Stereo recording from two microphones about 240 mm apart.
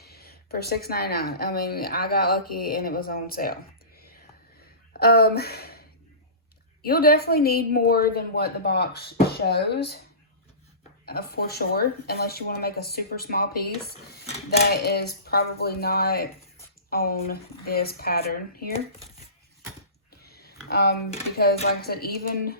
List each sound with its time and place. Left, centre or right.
0.0 s a sound: left
0.9 s speech: left
6.8 s speech: left
11.0 s speech: left
14.7 s speech: left
20.2 s a sound: left
20.7 s speech: left